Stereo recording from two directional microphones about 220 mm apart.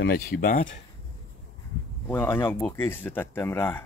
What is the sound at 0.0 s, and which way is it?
Speech, 40° left (ahead or behind).